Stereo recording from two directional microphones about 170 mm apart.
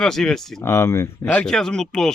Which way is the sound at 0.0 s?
5° left (ahead or behind).